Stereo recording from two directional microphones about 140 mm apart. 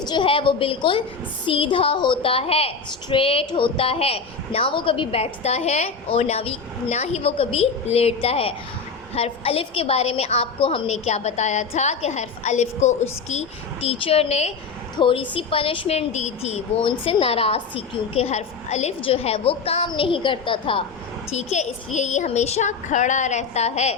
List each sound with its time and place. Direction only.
0.0 s a woman's voice: 35° left (ahead or behind); by 13.4 s 55° left (ahead or behind)
13.8 s a woman's voice: 45° left (ahead or behind)
14.9 s a woman's voice: 35° left (ahead or behind)
21.3 s speech: 55° left (ahead or behind)